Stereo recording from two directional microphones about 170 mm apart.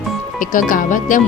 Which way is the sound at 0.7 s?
50° left (ahead or behind).